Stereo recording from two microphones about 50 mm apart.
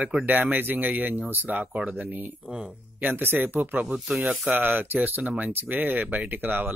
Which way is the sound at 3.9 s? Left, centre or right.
Centre.